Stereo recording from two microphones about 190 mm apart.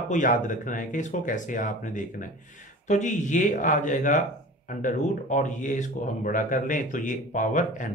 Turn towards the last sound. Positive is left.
turn(degrees=40)  # may be behind; listen again after turning